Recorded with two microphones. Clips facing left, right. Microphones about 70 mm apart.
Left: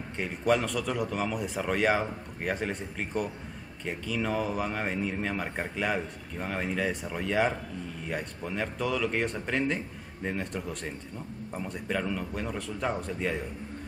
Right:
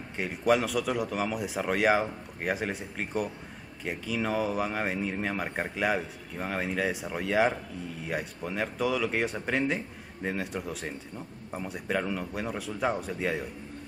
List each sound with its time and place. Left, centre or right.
0.2 s speech: centre